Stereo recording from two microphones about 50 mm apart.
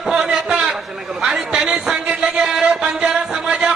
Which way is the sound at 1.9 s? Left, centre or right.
Right.